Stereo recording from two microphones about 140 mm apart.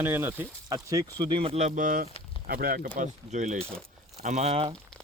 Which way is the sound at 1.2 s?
35° right (ahead or behind).